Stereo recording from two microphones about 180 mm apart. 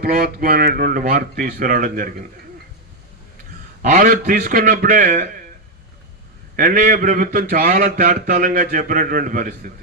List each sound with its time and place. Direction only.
0.0 s speech: 55° right (ahead or behind)
3.8 s speech: 45° right (ahead or behind)
6.6 s speech: 50° right (ahead or behind)